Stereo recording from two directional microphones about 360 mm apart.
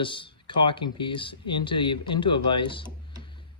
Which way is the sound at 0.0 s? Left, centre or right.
Centre.